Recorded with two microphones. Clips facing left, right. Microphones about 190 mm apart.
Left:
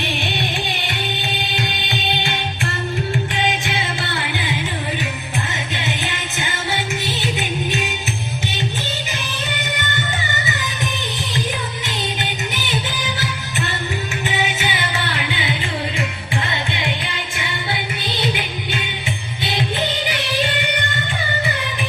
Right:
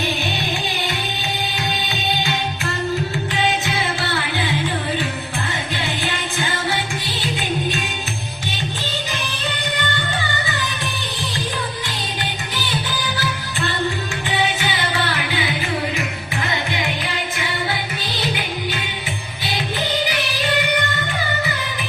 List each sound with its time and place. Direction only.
5.7 s music: 20° left (ahead or behind)
12.2 s music: 25° left (ahead or behind)
15.0 s music: 25° left (ahead or behind)
16.7 s music: 25° left (ahead or behind)